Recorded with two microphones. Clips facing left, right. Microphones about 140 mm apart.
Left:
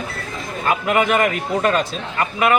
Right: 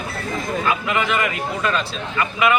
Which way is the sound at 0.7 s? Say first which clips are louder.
Left 6 dB; 50° left (ahead or behind).